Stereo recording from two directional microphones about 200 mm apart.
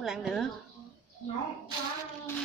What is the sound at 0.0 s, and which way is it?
Speech, centre (ahead or behind).